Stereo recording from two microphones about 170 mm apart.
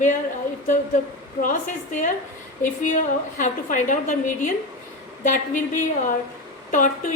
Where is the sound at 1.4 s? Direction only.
50° left (ahead or behind).